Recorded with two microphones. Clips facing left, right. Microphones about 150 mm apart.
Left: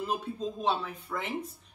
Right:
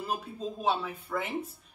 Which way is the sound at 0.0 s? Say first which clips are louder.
Left 2 dB; 5° right (ahead or behind).